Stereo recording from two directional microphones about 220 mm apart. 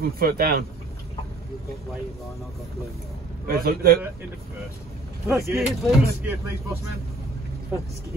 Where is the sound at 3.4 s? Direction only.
40° right (ahead or behind).